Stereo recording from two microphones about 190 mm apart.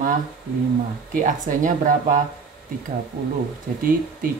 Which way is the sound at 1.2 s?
45° right (ahead or behind).